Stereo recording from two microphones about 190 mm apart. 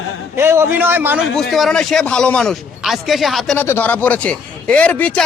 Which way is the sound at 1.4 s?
Centre (ahead or behind).